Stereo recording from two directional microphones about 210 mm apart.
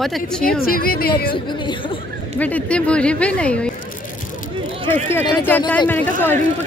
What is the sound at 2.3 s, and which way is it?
A woman's voice, 5° left (ahead or behind).